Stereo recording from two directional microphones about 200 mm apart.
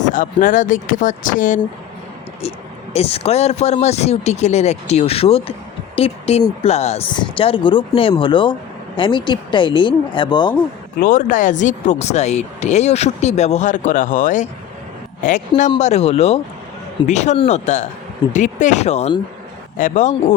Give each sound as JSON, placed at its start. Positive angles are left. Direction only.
{"t": 0.0, "sound": "speech", "side_deg": 40}
{"t": 2.9, "sound": "speech", "side_deg": 30}
{"t": 11.0, "sound": "speech", "side_deg": 40}